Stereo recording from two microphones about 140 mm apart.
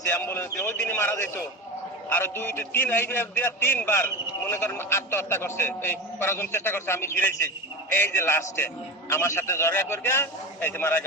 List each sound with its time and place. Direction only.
0.1 s a man's voice: 15° left (ahead or behind)